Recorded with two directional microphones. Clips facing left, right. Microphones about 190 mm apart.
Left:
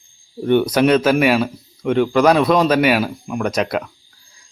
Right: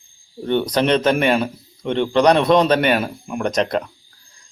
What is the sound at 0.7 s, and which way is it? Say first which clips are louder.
A man's voice: left 3 dB; 5° left (ahead or behind).